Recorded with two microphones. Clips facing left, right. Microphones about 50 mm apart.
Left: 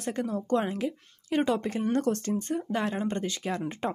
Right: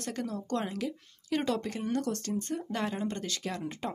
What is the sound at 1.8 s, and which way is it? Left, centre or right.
Speech, left.